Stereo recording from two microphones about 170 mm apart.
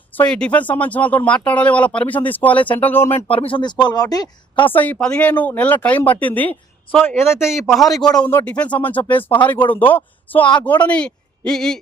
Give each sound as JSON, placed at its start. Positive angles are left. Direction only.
{"t": 0.1, "sound": "speech", "side_deg": 5}
{"t": 3.2, "sound": "a woman's voice", "side_deg": 35}
{"t": 4.7, "sound": "speech", "side_deg": 10}
{"t": 7.3, "sound": "speech", "side_deg": 0}
{"t": 7.9, "sound": "a woman's voice", "side_deg": 25}
{"t": 8.2, "sound": "a man's voice", "side_deg": 10}